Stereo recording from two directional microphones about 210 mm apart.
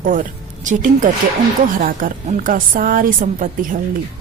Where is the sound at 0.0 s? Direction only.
40° right (ahead or behind).